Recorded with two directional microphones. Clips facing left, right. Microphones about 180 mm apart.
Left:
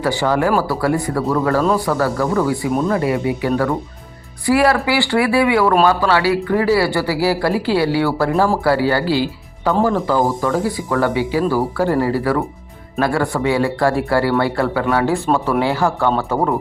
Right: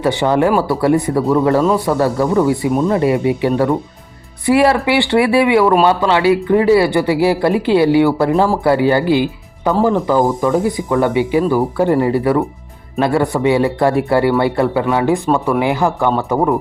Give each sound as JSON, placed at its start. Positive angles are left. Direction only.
{"t": 0.0, "sound": "speech", "side_deg": -20}